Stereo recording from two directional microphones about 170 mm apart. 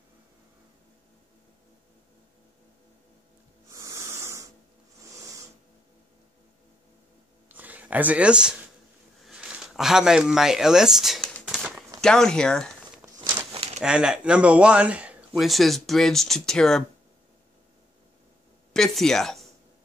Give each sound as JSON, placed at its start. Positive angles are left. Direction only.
{"t": 3.7, "sound": "a sound", "side_deg": -20}
{"t": 7.4, "sound": "a sound", "side_deg": -10}
{"t": 12.0, "sound": "speech", "side_deg": 5}
{"t": 13.5, "sound": "bird", "side_deg": -35}
{"t": 13.7, "sound": "speech", "side_deg": -5}
{"t": 18.7, "sound": "speech", "side_deg": 0}